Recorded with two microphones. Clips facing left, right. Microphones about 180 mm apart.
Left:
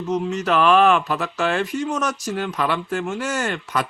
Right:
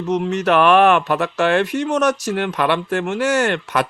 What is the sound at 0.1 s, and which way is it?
Speech, 70° right (ahead or behind).